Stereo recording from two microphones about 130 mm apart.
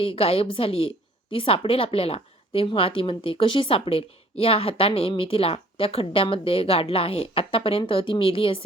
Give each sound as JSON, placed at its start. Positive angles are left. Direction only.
{"t": 0.0, "sound": "a woman's voice", "side_deg": 50}